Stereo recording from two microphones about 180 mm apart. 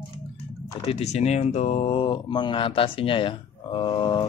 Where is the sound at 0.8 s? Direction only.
35° left (ahead or behind).